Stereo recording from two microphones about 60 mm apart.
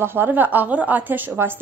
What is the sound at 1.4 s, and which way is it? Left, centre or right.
Speech, right.